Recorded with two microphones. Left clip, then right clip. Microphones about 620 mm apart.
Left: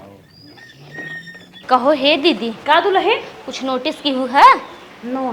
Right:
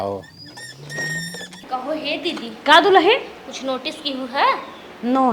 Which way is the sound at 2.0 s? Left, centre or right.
Left.